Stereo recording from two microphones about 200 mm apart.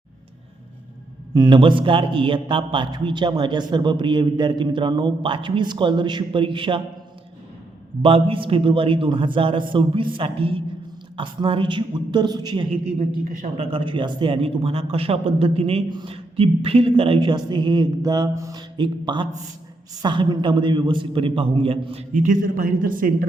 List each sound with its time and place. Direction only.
1.3 s a man's voice: 20° right (ahead or behind)
8.0 s a man's voice: 25° right (ahead or behind)
13.2 s a man's voice: 40° right (ahead or behind)
13.7 s a man's voice: 25° right (ahead or behind); by 23.1 s 45° right (ahead or behind)